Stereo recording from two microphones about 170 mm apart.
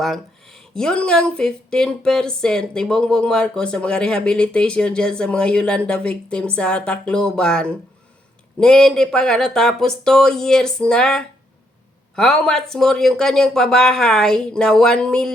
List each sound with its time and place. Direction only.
0.0 s speech: centre (ahead or behind)